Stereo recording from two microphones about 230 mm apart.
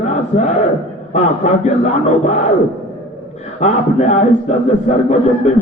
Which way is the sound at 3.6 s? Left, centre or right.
Left.